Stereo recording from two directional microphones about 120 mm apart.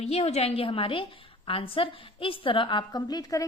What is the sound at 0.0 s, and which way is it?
A woman's voice, 60° left (ahead or behind).